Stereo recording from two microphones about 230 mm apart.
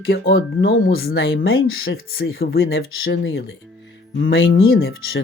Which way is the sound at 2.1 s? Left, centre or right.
Left.